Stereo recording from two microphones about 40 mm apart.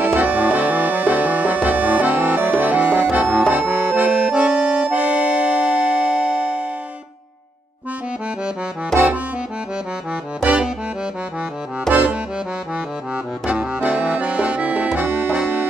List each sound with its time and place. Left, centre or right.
0.0 s music: right
4.3 s accordion: right
8.9 s accordion: centre
13.7 s accordion: right